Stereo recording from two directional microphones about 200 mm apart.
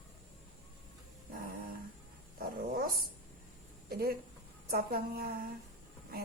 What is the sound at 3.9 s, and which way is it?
A woman's voice, 50° right (ahead or behind).